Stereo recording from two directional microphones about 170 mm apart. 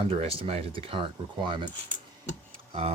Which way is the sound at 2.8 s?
30° right (ahead or behind).